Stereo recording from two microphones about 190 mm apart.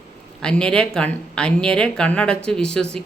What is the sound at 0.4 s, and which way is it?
Speech, 5° left (ahead or behind).